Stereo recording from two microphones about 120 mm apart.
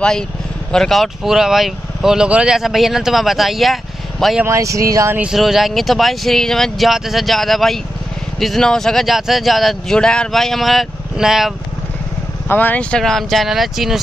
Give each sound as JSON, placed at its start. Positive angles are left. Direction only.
{"t": 0.7, "sound": "speech", "side_deg": 5}
{"t": 4.5, "sound": "speech", "side_deg": -25}
{"t": 5.1, "sound": "speech", "side_deg": -5}
{"t": 12.4, "sound": "speech", "side_deg": 15}